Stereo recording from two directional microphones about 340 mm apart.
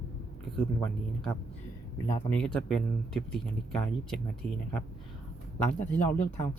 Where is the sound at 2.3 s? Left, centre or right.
Centre.